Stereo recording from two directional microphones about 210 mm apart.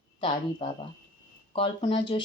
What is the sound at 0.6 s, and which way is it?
Speech, 25° left (ahead or behind).